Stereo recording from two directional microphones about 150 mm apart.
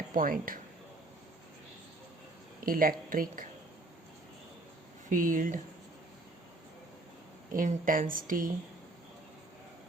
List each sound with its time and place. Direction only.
0.1 s speech: 70° right (ahead or behind)
2.6 s speech: 70° right (ahead or behind)
5.0 s speech: 60° right (ahead or behind)
7.5 s speech: 65° right (ahead or behind)